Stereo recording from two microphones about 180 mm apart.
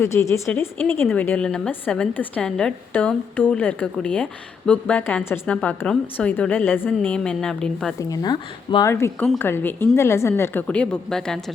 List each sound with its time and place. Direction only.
0.0 s a woman's voice: 15° left (ahead or behind)
7.9 s a woman's voice: 20° left (ahead or behind); by 11.5 s 5° left (ahead or behind)